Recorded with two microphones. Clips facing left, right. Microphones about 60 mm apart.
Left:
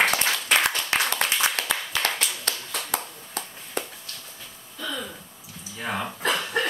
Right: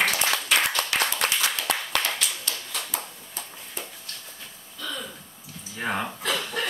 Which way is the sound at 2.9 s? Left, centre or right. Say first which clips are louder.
Left 4 dB; left.